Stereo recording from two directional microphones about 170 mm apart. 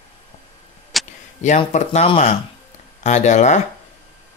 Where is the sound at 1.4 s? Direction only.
45° left (ahead or behind).